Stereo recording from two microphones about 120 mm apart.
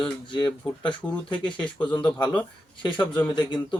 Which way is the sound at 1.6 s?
10° left (ahead or behind).